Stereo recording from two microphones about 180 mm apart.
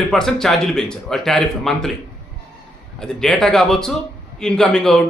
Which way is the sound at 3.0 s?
Centre (ahead or behind).